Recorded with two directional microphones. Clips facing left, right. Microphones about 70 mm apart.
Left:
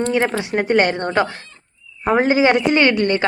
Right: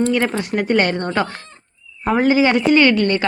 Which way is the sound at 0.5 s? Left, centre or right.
Left.